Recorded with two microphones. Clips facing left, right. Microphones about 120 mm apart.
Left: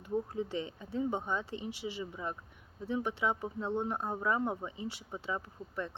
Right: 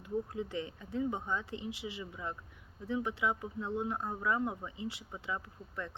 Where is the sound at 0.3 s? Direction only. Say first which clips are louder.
Left 2 dB; 25° left (ahead or behind).